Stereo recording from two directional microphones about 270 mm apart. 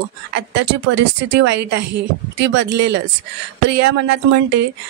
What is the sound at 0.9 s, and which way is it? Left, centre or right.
Speech, right.